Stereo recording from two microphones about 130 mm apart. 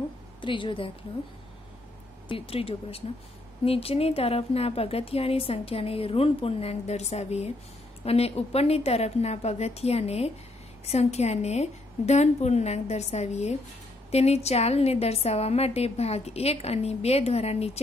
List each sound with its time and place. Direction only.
0.4 s a woman's voice: 40° left (ahead or behind)
2.2 s a woman's voice: 45° left (ahead or behind)